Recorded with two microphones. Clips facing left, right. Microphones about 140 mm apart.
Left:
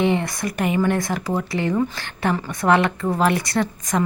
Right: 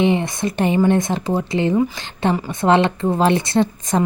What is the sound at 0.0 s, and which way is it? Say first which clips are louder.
Speech: right 3 dB; 20° right (ahead or behind).